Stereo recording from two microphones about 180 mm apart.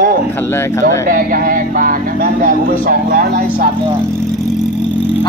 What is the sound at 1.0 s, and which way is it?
Speech, 50° right (ahead or behind).